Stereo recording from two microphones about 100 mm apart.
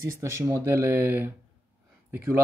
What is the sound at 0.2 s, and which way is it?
Speech, 30° right (ahead or behind).